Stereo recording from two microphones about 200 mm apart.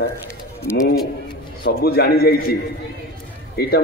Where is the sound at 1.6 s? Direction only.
50° left (ahead or behind).